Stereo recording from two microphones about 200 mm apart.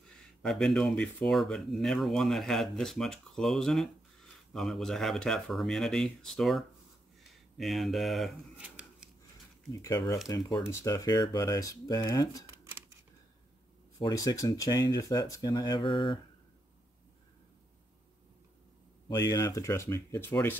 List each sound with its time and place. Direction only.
0.4 s speech: centre (ahead or behind)
10.2 s speech: 20° left (ahead or behind)
14.0 s speech: 15° left (ahead or behind)
19.0 s speech: 15° left (ahead or behind)